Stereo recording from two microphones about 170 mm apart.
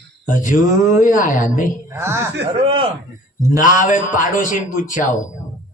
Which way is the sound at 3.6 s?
50° left (ahead or behind).